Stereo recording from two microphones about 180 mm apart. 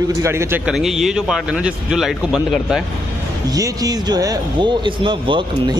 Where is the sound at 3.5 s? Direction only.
20° right (ahead or behind).